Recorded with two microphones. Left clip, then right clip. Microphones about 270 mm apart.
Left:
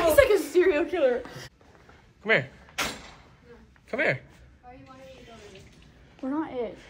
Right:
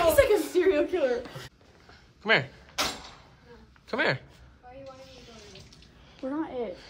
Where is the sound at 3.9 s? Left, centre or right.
Centre.